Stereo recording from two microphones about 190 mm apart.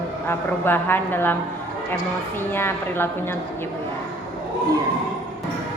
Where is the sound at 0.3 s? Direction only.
10° left (ahead or behind).